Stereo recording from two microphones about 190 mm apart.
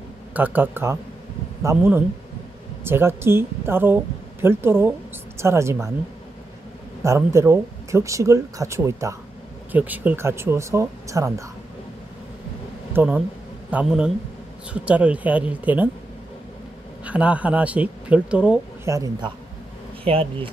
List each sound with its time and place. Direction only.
0.3 s a woman's voice: 10° right (ahead or behind)
7.0 s speech: 15° right (ahead or behind)
12.9 s a man's voice: 5° right (ahead or behind)
17.0 s speech: 5° right (ahead or behind)
18.9 s speech: 20° right (ahead or behind)